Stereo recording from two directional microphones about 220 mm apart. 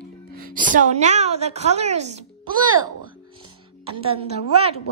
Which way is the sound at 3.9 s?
25° right (ahead or behind).